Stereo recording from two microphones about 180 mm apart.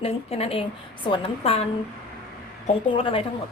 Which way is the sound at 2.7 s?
30° left (ahead or behind).